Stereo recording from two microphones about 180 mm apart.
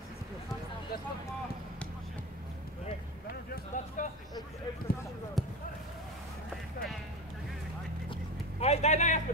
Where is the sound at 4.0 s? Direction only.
45° left (ahead or behind).